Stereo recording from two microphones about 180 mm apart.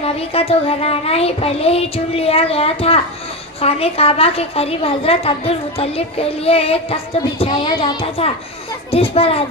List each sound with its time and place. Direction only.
0.0 s a woman's voice: 30° left (ahead or behind)